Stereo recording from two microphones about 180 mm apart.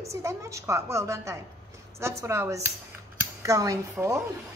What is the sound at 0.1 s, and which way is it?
A woman's voice, 15° right (ahead or behind).